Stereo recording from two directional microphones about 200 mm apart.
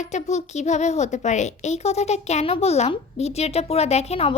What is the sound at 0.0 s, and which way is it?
A child's voice, 35° left (ahead or behind).